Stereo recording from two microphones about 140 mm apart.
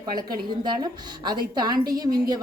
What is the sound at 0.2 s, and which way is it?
A woman's voice, 30° right (ahead or behind).